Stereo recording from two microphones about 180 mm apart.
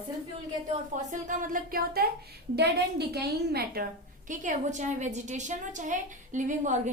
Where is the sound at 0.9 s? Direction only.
45° right (ahead or behind); by 3.8 s 60° right (ahead or behind).